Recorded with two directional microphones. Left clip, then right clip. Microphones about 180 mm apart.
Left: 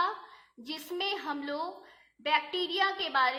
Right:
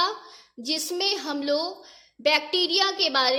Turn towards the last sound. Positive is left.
turn(degrees=-40)  # may be behind; listen again after turning